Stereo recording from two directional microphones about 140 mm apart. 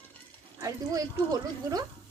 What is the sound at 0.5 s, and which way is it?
A woman's voice, 25° right (ahead or behind).